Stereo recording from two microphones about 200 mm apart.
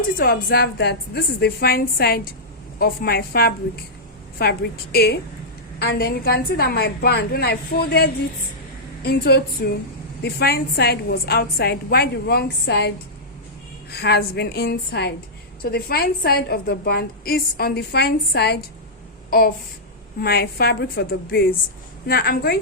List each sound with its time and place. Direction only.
0.2 s a woman's voice: 50° left (ahead or behind)
13.9 s a woman's voice: 50° left (ahead or behind)
20.2 s a woman's voice: 50° left (ahead or behind)